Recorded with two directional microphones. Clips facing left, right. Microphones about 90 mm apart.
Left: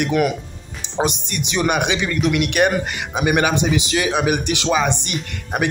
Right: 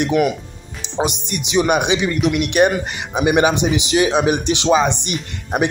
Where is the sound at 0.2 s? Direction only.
5° right (ahead or behind).